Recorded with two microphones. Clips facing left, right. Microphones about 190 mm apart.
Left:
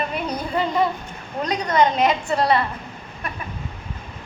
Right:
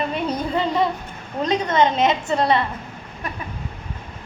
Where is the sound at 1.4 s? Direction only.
25° right (ahead or behind).